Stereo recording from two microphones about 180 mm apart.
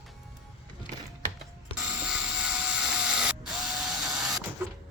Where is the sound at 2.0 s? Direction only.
5° right (ahead or behind).